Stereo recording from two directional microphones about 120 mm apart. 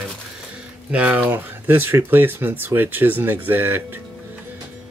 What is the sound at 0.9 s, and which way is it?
Speech, 10° right (ahead or behind).